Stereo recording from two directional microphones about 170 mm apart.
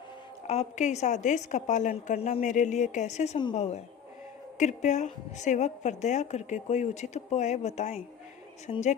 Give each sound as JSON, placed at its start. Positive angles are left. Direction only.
{"t": 0.4, "sound": "a woman's voice", "side_deg": 40}